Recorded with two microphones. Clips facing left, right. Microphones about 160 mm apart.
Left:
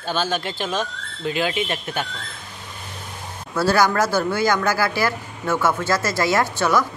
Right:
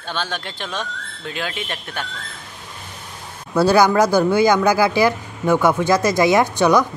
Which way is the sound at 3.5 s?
20° right (ahead or behind).